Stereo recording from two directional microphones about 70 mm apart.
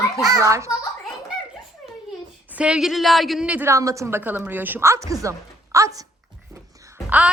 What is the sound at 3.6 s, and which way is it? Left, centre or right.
Speech, right.